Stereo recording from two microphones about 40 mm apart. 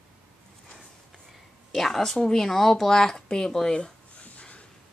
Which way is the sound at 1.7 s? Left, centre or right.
Centre.